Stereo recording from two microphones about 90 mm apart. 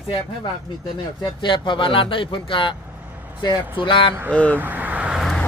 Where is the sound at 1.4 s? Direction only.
65° left (ahead or behind).